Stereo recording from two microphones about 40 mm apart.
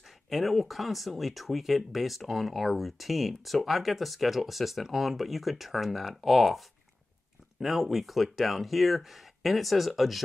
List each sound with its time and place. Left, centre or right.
0.3 s speech: centre
7.6 s speech: centre